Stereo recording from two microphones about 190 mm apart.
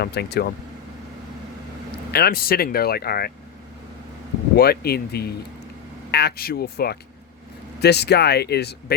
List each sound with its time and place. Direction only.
0.0 s speech: 60° left (ahead or behind)
2.1 s speech: 55° left (ahead or behind)
4.5 s speech: 55° left (ahead or behind)